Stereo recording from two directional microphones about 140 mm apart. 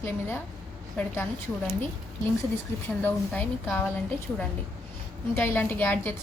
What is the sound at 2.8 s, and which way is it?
A woman's voice, 15° left (ahead or behind).